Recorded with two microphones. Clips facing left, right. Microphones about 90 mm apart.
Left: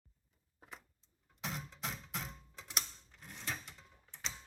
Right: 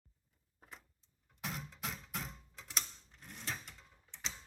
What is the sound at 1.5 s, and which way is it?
Music, centre (ahead or behind).